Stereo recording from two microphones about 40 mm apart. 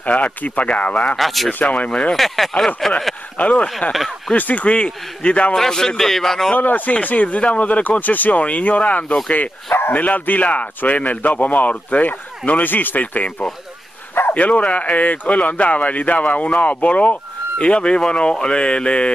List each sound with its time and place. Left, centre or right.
0.0 s speech: left
1.1 s speech: centre
1.5 s speech: left
1.9 s speech: left
2.1 s a man's voice: centre
3.3 s speech: left
4.6 s speech: left
5.6 s a man's voice: centre
6.5 s speech: left
9.7 s bow-wow: left
9.9 s speech: left